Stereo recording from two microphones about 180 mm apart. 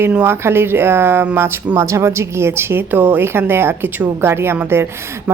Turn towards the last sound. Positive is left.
turn(degrees=-15)  # may be behind; listen again after turning